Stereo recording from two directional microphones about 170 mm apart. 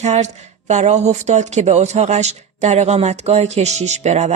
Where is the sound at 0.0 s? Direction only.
40° right (ahead or behind).